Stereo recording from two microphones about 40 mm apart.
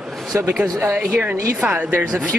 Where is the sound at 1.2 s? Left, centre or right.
Right.